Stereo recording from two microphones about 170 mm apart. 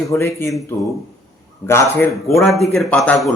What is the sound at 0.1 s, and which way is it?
Speech, 15° left (ahead or behind).